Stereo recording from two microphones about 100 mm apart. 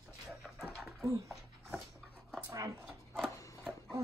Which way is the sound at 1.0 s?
30° right (ahead or behind).